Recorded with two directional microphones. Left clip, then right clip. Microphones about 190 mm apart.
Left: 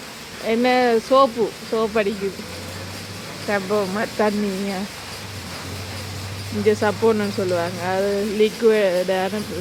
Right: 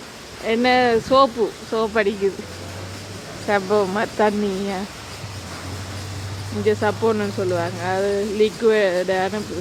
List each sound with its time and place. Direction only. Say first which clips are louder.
0.4 s speech: right 1 dB; 10° right (ahead or behind)
3.5 s speech: right 3 dB; 15° right (ahead or behind)
6.7 s speech: left 1 dB; centre (ahead or behind)